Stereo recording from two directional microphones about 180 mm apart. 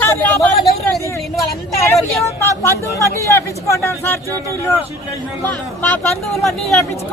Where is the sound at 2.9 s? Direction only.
15° left (ahead or behind).